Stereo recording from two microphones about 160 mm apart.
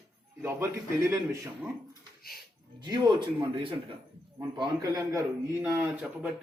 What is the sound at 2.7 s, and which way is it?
A man's voice, 25° right (ahead or behind).